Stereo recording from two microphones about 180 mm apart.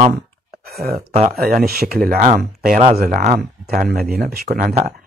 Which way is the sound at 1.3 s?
55° right (ahead or behind).